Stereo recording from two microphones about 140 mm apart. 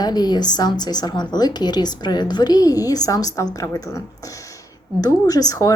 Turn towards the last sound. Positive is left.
turn(degrees=25)  # may be behind; listen again after turning